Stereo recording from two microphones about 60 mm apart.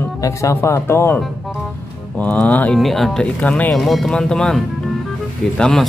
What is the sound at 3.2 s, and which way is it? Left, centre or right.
Speech, left.